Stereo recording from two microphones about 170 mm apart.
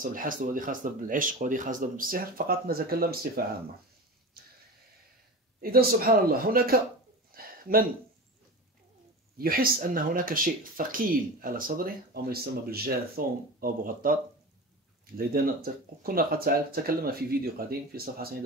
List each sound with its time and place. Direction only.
0.0 s speech: 55° right (ahead or behind)
5.6 s speech: 60° right (ahead or behind)
7.3 s a sound: 60° right (ahead or behind)
9.4 s speech: 60° right (ahead or behind)
15.1 s speech: 60° right (ahead or behind)